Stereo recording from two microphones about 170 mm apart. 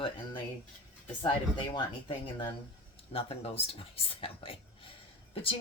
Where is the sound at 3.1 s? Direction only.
35° left (ahead or behind).